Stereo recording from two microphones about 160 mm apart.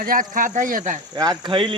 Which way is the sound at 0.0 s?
60° right (ahead or behind).